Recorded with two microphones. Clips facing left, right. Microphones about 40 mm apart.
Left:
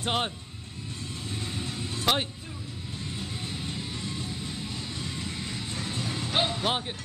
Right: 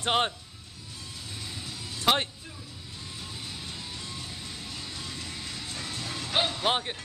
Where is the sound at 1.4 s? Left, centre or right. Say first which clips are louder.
Left 5 dB; left.